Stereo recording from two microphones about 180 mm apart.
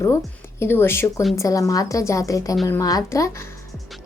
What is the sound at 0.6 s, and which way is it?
A woman's voice, 15° left (ahead or behind).